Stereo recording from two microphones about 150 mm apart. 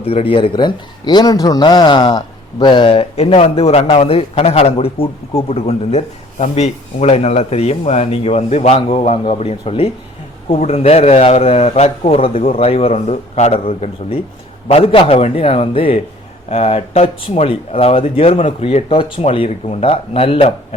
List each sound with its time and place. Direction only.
0.0 s a man's voice: 40° left (ahead or behind)